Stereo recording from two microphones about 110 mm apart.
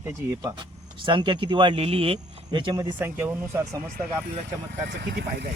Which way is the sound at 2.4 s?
45° right (ahead or behind).